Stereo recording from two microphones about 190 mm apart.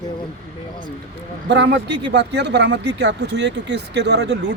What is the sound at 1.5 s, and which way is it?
Speech, 65° right (ahead or behind).